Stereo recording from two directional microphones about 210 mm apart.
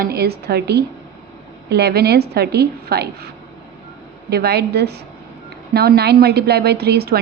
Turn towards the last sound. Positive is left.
turn(degrees=-50)  # may be behind; listen again after turning